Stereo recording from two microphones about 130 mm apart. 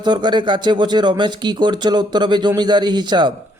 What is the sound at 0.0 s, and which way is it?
A man's voice, 35° right (ahead or behind).